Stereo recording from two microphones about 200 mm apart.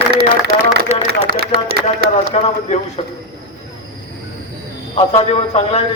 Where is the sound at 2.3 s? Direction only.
35° left (ahead or behind).